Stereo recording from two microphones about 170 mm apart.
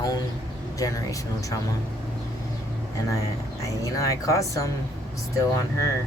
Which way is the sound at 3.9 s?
20° left (ahead or behind).